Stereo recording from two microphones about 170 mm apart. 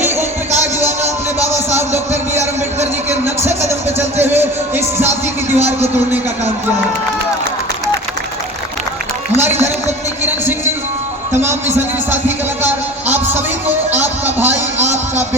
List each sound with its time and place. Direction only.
0.2 s music: 15° right (ahead or behind)
3.7 s music: 15° right (ahead or behind)
12.6 s music: 10° right (ahead or behind)
14.8 s a sound: 45° right (ahead or behind)